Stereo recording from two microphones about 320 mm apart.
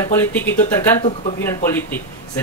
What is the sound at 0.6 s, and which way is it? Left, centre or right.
Speech, centre.